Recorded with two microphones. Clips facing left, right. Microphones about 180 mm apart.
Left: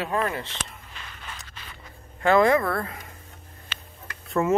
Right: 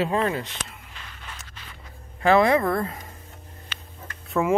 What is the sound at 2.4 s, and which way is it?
Speech, 15° right (ahead or behind).